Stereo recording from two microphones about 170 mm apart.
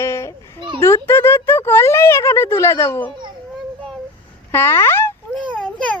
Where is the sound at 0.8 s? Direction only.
15° left (ahead or behind).